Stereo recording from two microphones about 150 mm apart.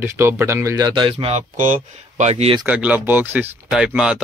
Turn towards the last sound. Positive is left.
turn(degrees=-5)  # may be behind; listen again after turning